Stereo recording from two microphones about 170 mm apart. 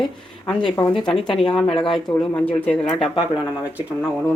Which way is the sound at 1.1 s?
5° left (ahead or behind).